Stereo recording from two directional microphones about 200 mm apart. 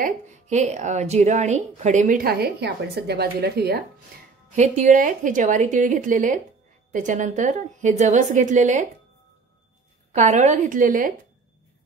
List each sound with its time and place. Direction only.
0.0 s a woman's voice: 35° right (ahead or behind); by 3.8 s 50° right (ahead or behind)
4.6 s a woman's voice: 35° right (ahead or behind)
10.1 s a woman's voice: 35° right (ahead or behind)